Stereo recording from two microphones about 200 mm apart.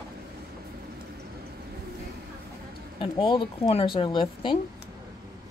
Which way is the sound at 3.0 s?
25° left (ahead or behind).